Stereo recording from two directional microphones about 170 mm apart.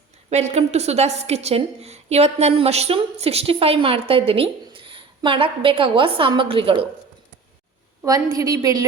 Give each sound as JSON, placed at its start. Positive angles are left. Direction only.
{"t": 0.3, "sound": "a woman's voice", "side_deg": -40}
{"t": 8.0, "sound": "a woman's voice", "side_deg": -20}